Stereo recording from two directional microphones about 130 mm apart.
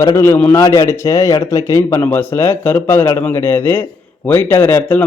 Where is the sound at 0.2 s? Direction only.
15° left (ahead or behind).